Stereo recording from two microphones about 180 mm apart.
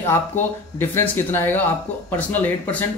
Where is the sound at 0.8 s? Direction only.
10° left (ahead or behind).